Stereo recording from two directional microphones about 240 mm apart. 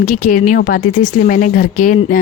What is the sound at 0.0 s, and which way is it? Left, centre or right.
Speech, left.